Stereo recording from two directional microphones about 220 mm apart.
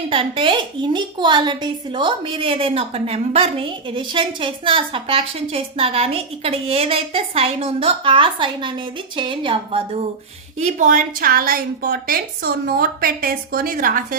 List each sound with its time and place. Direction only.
0.1 s a woman's voice: 25° right (ahead or behind)
10.6 s a woman's voice: 35° right (ahead or behind)